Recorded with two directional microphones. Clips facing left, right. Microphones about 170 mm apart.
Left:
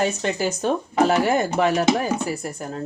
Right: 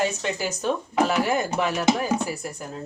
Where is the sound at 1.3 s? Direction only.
30° left (ahead or behind).